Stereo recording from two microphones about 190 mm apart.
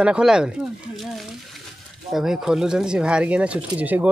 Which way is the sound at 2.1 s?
Centre (ahead or behind).